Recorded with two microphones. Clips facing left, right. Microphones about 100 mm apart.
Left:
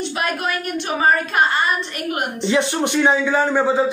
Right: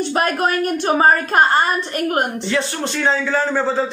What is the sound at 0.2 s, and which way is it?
A woman's voice, 40° right (ahead or behind).